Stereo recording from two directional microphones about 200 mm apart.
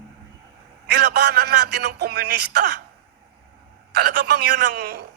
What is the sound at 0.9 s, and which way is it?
A man's voice, 55° right (ahead or behind).